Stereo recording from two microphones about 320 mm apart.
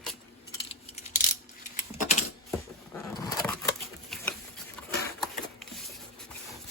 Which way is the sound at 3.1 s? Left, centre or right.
Centre.